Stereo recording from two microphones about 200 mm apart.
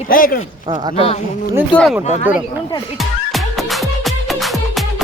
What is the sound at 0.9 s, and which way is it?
Speech, 30° left (ahead or behind).